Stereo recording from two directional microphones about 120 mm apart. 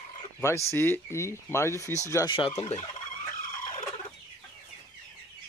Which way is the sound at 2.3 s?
55° left (ahead or behind).